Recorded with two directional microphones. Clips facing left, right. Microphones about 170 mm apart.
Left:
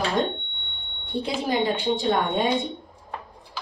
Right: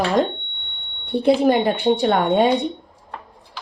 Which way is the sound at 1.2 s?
60° right (ahead or behind).